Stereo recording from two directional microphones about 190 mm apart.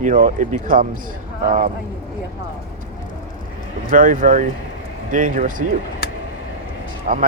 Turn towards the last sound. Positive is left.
turn(degrees=-45)  # may be behind; listen again after turning